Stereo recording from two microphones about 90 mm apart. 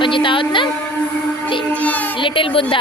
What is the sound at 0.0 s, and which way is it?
Speech, 70° left (ahead or behind).